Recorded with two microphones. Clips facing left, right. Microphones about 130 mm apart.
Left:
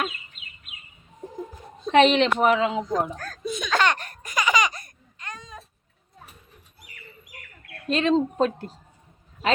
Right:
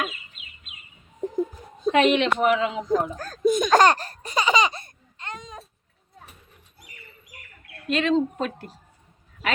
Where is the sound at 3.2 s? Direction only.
40° right (ahead or behind); by 5.6 s 20° right (ahead or behind).